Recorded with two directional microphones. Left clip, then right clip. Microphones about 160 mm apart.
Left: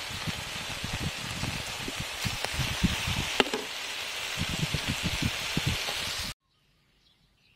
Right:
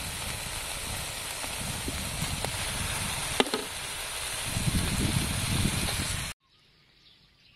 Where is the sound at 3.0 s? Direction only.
25° left (ahead or behind).